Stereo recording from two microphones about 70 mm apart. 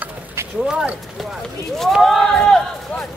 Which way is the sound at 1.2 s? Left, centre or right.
Centre.